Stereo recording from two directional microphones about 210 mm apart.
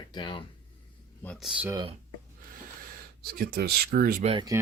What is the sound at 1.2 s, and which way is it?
Speech, 5° left (ahead or behind).